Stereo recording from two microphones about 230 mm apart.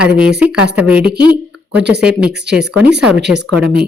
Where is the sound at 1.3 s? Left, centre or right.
Right.